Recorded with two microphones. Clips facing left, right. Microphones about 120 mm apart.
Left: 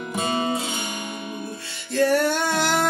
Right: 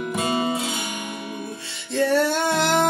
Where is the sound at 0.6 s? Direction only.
5° right (ahead or behind).